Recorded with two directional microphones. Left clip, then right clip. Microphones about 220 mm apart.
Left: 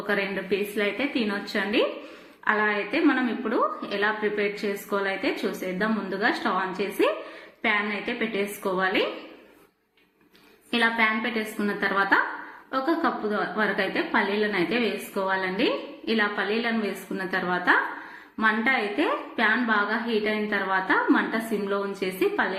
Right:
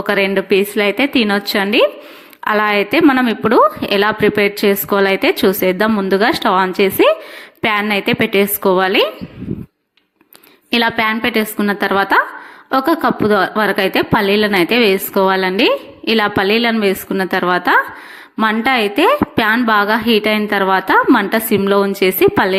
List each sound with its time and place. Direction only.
0.1 s a woman's voice: 45° right (ahead or behind)
10.7 s a woman's voice: 45° right (ahead or behind)